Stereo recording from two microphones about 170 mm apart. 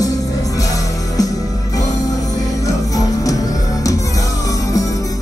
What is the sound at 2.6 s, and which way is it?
Music, 20° left (ahead or behind).